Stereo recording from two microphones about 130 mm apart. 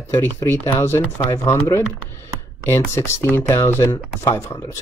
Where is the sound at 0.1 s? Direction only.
20° left (ahead or behind).